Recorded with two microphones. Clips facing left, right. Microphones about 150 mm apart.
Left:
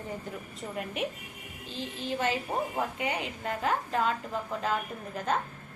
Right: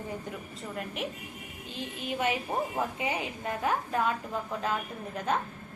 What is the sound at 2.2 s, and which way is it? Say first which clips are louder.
A woman's voice: right 1 dB; 15° right (ahead or behind).